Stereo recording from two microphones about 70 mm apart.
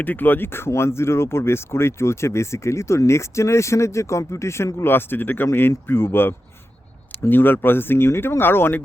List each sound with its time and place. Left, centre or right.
0.0 s speech: left